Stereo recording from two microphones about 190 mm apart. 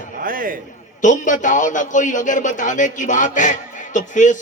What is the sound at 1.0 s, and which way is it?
A man's voice, 40° left (ahead or behind).